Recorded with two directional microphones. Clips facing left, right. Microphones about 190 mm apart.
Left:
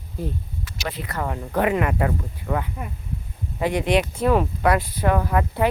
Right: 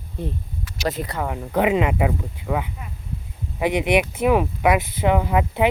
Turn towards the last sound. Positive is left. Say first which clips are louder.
# right 2 dB
turn(degrees=-15)  # may be behind; listen again after turning